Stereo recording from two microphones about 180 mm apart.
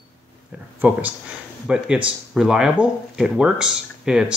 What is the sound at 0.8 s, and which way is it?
Speech, 10° right (ahead or behind).